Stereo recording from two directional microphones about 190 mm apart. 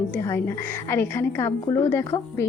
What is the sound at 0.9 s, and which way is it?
A woman's voice, 10° left (ahead or behind).